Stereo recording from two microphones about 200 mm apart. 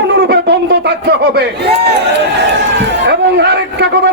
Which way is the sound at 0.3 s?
55° right (ahead or behind).